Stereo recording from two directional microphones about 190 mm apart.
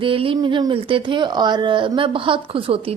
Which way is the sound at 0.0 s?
30° right (ahead or behind).